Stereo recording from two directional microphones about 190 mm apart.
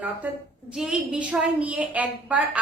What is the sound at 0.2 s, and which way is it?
A woman's voice, 10° right (ahead or behind).